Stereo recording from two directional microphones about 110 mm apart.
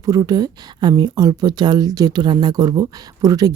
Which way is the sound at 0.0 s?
35° right (ahead or behind).